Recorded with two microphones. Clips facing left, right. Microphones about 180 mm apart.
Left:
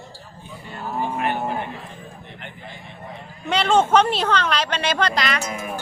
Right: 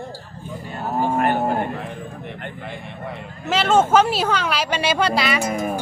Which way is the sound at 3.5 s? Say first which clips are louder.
Right 1 dB; 5° right (ahead or behind).